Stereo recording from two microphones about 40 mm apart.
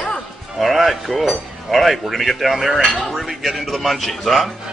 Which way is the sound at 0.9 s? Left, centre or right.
Centre.